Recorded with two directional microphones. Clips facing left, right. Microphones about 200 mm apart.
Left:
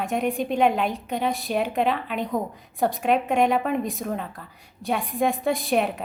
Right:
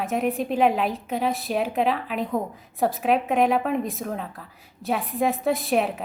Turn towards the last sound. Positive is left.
turn(degrees=0)  # may be behind; listen again after turning